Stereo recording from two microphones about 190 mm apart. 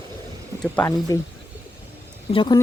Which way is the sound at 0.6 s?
10° left (ahead or behind).